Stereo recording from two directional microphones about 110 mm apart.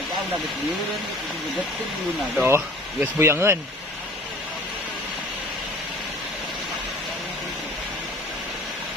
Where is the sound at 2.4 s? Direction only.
20° right (ahead or behind).